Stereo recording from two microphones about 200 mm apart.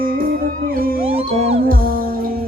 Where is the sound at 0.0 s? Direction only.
45° right (ahead or behind).